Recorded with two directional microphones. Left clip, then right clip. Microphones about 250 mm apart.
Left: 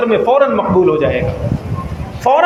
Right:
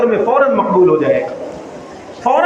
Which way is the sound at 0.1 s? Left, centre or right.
Left.